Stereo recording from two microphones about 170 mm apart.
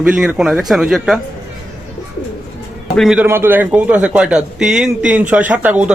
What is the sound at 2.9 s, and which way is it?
Speech, centre (ahead or behind).